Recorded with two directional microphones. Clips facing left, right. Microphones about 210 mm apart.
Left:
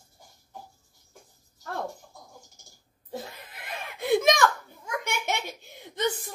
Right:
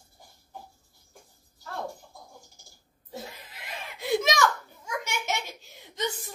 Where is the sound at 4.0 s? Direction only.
55° left (ahead or behind).